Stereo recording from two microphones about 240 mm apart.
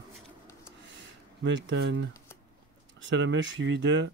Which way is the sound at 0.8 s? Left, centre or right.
Right.